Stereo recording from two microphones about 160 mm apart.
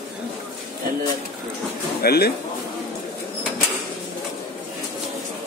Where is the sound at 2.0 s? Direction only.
80° left.